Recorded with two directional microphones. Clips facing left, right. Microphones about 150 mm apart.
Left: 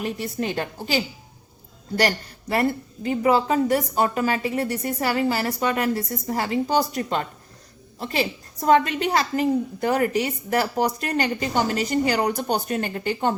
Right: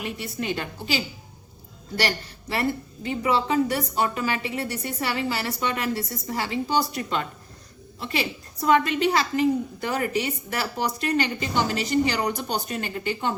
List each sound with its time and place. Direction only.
0.0 s a woman's voice: 40° left (ahead or behind)